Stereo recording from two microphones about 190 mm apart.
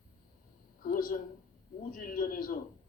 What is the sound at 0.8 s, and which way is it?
A woman's voice, 50° left (ahead or behind).